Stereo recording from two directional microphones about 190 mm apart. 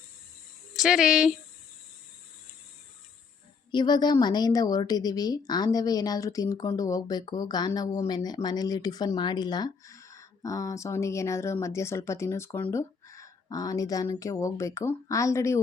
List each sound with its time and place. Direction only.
0.8 s speech: 5° right (ahead or behind)
3.7 s a woman's voice: 25° left (ahead or behind)